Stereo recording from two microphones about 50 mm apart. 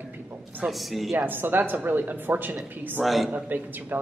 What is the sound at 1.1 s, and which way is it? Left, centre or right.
A woman's voice, right.